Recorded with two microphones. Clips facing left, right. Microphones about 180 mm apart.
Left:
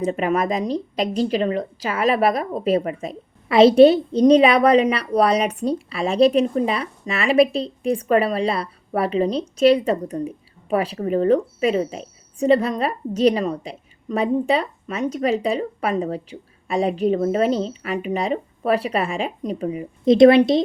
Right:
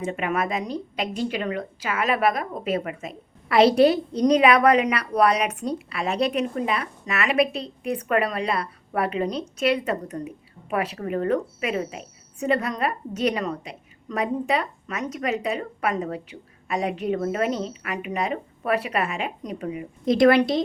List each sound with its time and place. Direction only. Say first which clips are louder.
0.0 s a woman's voice: left 5 dB; 35° left (ahead or behind)